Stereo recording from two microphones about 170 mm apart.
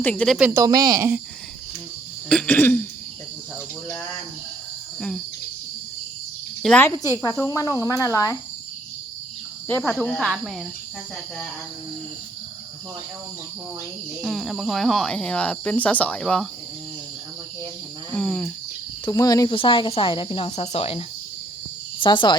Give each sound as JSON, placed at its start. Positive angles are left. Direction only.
{"t": 0.0, "sound": "speech", "side_deg": 5}
{"t": 0.3, "sound": "speech", "side_deg": -5}
{"t": 0.6, "sound": "speech", "side_deg": -20}
{"t": 2.3, "sound": "throat clearing", "side_deg": 10}
{"t": 4.9, "sound": "cricket", "side_deg": 5}
{"t": 6.6, "sound": "speech", "side_deg": 5}
{"t": 7.2, "sound": "cricket", "side_deg": 20}
{"t": 9.6, "sound": "throat clearing", "side_deg": 15}
{"t": 9.9, "sound": "speech", "side_deg": 5}
{"t": 14.2, "sound": "speech", "side_deg": 0}
{"t": 18.1, "sound": "speech", "side_deg": 5}
{"t": 19.0, "sound": "speech", "side_deg": 20}
{"t": 22.0, "sound": "cricket", "side_deg": 25}